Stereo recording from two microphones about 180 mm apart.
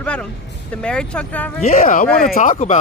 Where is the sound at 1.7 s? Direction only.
50° left (ahead or behind).